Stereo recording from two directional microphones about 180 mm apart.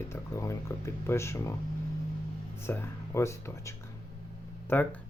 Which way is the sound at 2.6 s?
15° left (ahead or behind).